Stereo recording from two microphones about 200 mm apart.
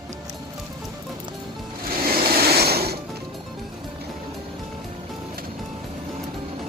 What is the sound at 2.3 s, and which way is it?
Mechanisms, 50° right (ahead or behind).